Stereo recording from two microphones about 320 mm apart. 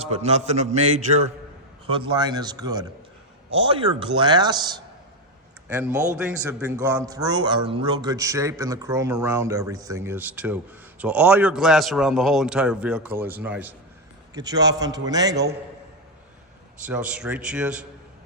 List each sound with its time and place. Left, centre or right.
0.0 s a man's voice: centre
16.8 s a man's voice: centre